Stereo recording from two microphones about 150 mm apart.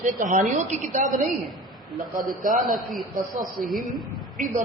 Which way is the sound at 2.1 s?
65° right (ahead or behind).